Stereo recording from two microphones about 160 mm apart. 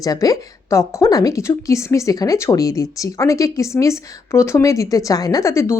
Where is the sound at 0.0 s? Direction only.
20° left (ahead or behind).